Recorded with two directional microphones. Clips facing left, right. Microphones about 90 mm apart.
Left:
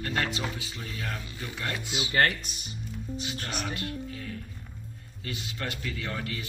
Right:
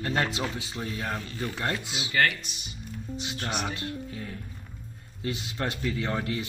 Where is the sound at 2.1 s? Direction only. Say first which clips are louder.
Even; 40° left (ahead or behind).